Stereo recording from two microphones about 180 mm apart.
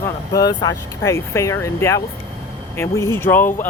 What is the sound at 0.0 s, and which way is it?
Speech, 20° left (ahead or behind).